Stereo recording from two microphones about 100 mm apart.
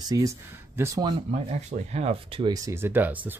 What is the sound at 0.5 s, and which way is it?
Speech, 25° right (ahead or behind).